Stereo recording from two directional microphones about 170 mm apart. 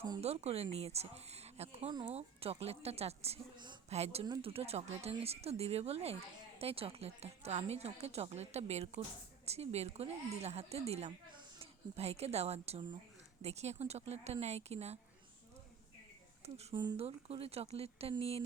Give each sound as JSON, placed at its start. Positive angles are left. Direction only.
{"t": 0.2, "sound": "speech", "side_deg": -40}
{"t": 16.6, "sound": "speech", "side_deg": -40}
{"t": 16.8, "sound": "speech", "side_deg": -25}
{"t": 17.1, "sound": "speech", "side_deg": -35}